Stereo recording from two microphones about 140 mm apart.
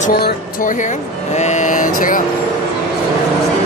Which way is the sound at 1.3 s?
55° left (ahead or behind).